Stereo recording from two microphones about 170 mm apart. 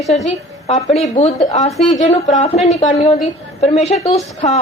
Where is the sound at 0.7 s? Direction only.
40° left (ahead or behind).